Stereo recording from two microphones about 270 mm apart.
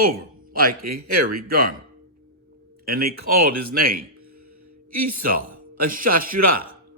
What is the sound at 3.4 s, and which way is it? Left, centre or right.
Speech, right.